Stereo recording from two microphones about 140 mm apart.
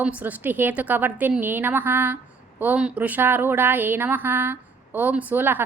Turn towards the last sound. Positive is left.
turn(degrees=-15)  # may be behind; listen again after turning